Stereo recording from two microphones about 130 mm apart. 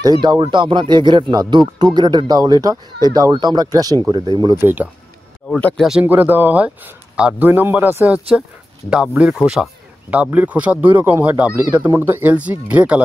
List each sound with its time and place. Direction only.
0.0 s speech: 30° right (ahead or behind)
4.6 s speech: 15° right (ahead or behind)
5.8 s speech: 5° right (ahead or behind)
6.0 s speech: 15° right (ahead or behind)